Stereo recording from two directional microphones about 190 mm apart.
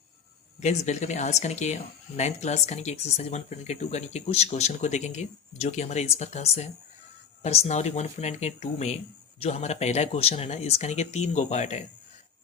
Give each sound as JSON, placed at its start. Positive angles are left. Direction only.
{"t": 0.6, "sound": "speech", "side_deg": 35}